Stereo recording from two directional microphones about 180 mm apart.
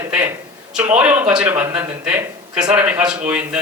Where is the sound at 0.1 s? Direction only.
10° right (ahead or behind).